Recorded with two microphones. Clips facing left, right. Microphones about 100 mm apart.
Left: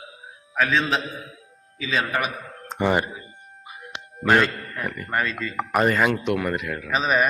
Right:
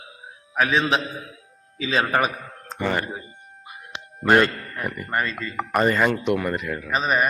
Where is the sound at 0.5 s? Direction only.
15° right (ahead or behind).